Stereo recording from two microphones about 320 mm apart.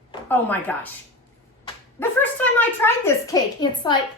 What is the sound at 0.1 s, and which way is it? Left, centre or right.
Speech, centre.